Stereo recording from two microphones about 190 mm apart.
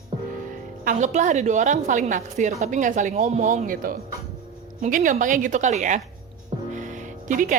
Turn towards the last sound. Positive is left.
turn(degrees=-40)  # may be behind; listen again after turning